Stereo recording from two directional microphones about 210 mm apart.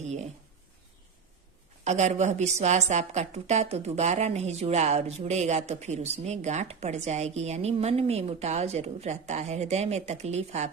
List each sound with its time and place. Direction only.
0.0 s a woman's voice: 35° right (ahead or behind)
1.8 s a woman's voice: 35° right (ahead or behind)